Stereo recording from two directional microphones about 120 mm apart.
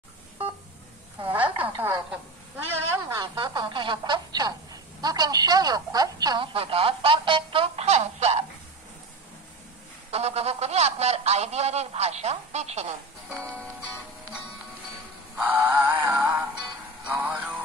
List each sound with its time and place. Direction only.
1.3 s a sound: 15° right (ahead or behind)
3.2 s speech: 35° right (ahead or behind); by 8.5 s 65° right (ahead or behind)
10.1 s speech: 60° right (ahead or behind)
15.3 s music: 15° right (ahead or behind)